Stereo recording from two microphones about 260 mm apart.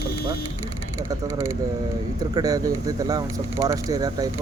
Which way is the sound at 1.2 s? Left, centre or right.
Centre.